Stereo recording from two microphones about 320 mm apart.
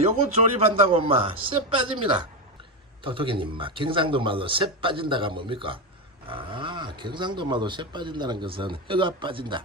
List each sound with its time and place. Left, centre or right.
0.0 s speech: centre